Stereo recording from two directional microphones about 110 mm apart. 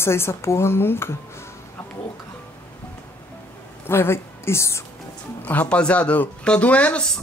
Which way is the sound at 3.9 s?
20° left (ahead or behind).